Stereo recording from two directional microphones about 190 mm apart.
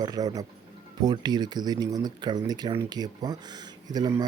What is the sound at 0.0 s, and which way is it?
Speech, 20° right (ahead or behind).